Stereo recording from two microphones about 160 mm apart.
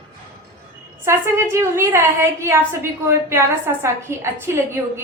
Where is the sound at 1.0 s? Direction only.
15° right (ahead or behind).